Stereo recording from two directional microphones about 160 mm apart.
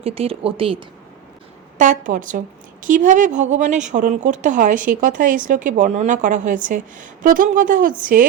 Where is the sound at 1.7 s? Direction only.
50° right (ahead or behind).